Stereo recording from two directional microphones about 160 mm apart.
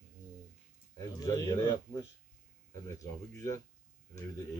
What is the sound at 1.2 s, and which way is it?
Speech, 20° left (ahead or behind).